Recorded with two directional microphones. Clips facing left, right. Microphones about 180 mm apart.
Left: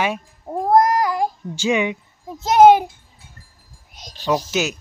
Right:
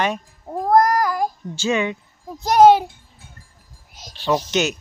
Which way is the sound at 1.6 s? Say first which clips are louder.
Left 1 dB; 15° left (ahead or behind).